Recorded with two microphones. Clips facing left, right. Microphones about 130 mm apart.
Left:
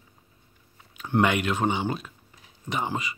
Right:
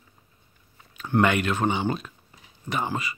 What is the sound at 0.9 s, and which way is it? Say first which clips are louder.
Speech: right 1 dB; 15° left (ahead or behind).